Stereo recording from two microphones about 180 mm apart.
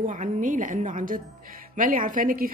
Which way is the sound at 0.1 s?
45° right (ahead or behind).